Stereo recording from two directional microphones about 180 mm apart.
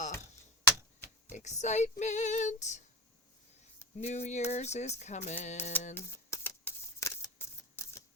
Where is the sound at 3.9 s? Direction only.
40° left (ahead or behind).